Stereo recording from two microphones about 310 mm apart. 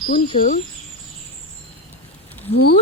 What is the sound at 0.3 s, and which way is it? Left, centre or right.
Speech, left.